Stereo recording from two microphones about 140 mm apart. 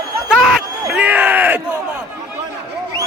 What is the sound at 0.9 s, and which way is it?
Crowd, 10° right (ahead or behind).